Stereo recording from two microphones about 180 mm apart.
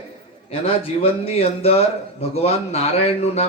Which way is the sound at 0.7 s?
30° left (ahead or behind).